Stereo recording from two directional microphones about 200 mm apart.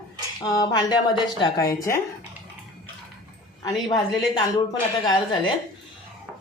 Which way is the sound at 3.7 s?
Centre (ahead or behind).